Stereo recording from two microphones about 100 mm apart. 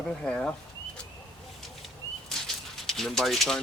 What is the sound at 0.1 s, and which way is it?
Speech, 10° left (ahead or behind).